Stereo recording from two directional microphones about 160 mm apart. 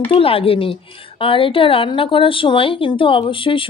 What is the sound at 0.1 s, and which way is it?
A woman's voice, 35° left (ahead or behind).